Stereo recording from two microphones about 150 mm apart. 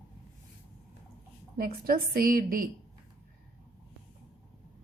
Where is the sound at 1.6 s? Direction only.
75° right (ahead or behind).